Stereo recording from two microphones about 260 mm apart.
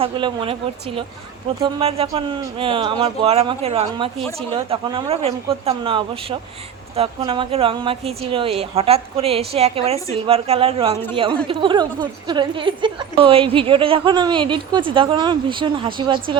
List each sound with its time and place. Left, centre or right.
0.0 s a woman's voice: centre